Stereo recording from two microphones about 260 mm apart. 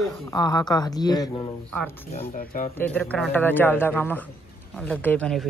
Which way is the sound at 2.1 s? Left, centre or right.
Left.